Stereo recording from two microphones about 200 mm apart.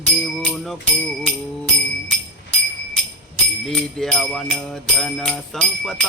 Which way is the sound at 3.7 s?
5° left (ahead or behind).